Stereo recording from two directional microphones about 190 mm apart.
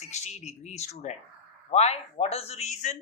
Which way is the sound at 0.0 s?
35° left (ahead or behind).